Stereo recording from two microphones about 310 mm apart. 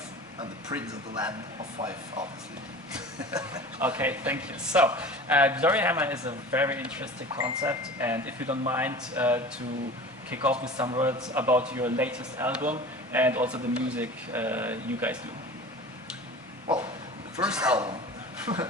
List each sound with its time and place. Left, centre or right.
0.3 s speech: centre
3.3 s speech: centre
16.6 s speech: centre
17.3 s speech: centre
18.5 s beatboxing: centre